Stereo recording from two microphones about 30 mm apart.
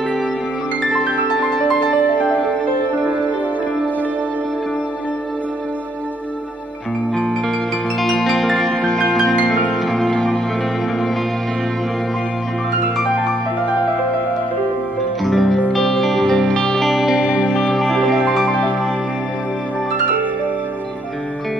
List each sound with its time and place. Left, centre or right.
8.0 s music: centre
8.6 s music: centre
15.2 s music: centre
16.3 s music: left
17.8 s music: centre